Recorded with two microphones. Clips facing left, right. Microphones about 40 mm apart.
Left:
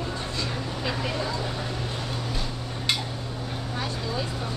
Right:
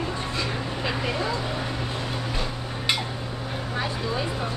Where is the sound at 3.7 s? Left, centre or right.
Centre.